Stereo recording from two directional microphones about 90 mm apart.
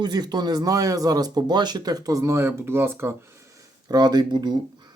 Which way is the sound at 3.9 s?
50° right (ahead or behind).